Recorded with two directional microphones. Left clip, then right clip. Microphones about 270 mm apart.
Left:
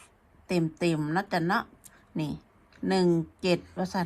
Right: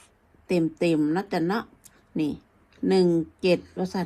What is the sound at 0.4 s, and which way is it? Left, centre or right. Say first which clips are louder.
Speech: right 4 dB; left.